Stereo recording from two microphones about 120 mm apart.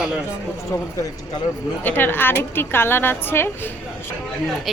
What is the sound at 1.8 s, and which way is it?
A woman's voice, 15° left (ahead or behind).